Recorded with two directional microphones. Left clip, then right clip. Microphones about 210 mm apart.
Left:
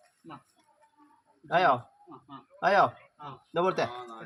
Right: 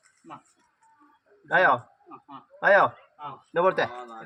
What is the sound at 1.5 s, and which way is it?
Speech, 25° left (ahead or behind).